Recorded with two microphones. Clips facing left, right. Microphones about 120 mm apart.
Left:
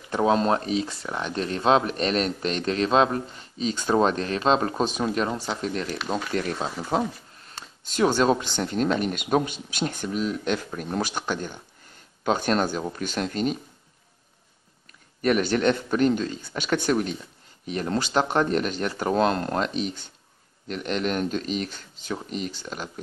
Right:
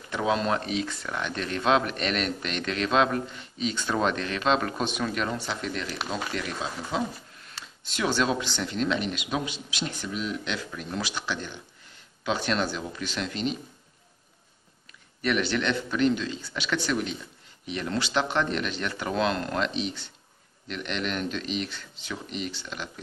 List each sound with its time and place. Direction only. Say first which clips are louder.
0.1 s speech: left 5 dB; 35° left (ahead or behind)
15.2 s speech: left 5 dB; 45° left (ahead or behind)